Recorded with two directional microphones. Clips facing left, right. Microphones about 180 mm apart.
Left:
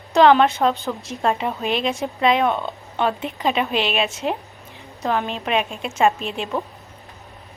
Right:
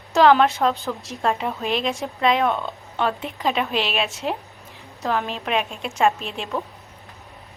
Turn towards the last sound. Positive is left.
turn(degrees=0)  # may be behind; listen again after turning